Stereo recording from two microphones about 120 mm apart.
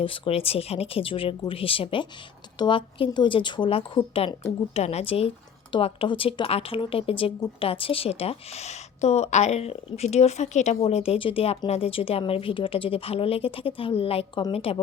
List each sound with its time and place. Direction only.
0.0 s speech: 50° left (ahead or behind)
4.7 s a woman's voice: 65° left (ahead or behind)